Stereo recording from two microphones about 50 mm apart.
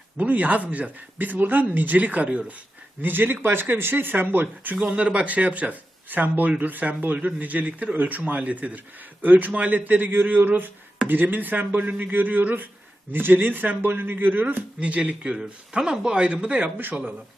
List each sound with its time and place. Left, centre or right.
0.2 s speech: right
3.0 s speech: right
14.8 s speech: right
15.7 s speech: centre